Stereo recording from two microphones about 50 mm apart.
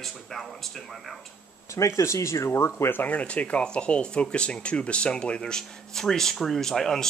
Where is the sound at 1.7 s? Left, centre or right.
Left.